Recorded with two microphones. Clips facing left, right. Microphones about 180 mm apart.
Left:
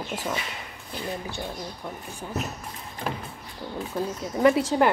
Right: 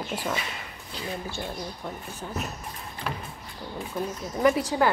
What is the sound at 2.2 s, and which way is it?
Speech, 10° left (ahead or behind).